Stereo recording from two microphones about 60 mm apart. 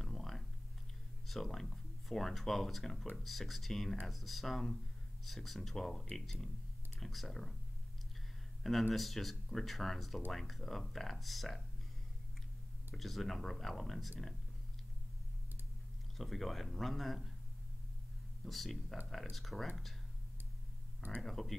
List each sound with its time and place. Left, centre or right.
0.0 s a sound: centre
1.2 s speech: centre
8.9 s speech: centre
12.9 s speech: centre
16.2 s speech: centre
18.4 s speech: centre
21.2 s speech: centre